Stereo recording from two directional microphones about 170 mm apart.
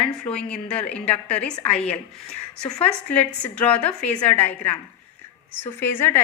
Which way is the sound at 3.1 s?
10° left (ahead or behind).